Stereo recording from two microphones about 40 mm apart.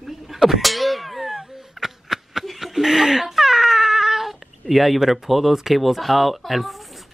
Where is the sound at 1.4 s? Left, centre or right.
Centre.